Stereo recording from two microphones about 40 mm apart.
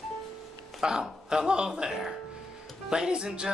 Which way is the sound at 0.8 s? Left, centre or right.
Centre.